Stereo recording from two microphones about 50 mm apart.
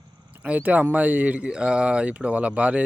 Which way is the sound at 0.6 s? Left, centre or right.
Right.